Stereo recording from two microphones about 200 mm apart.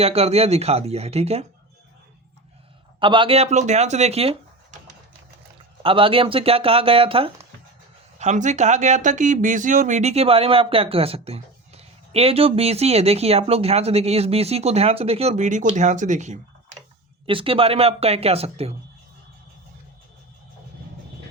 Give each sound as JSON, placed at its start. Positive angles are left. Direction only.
{"t": 0.0, "sound": "speech", "side_deg": -30}
{"t": 3.0, "sound": "speech", "side_deg": -25}
{"t": 5.8, "sound": "speech", "side_deg": -25}
{"t": 17.2, "sound": "speech", "side_deg": -25}